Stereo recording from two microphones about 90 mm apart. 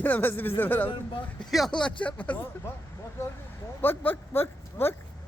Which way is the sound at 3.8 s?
25° left (ahead or behind).